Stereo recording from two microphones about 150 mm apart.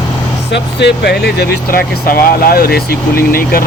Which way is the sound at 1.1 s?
90° left.